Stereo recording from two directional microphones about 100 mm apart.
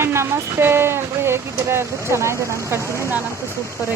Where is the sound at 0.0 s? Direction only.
25° right (ahead or behind).